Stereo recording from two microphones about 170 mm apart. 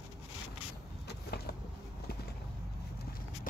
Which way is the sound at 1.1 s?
70° left (ahead or behind).